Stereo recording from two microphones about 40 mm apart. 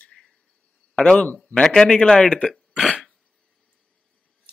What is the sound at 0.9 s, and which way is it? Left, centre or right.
A man's voice, left.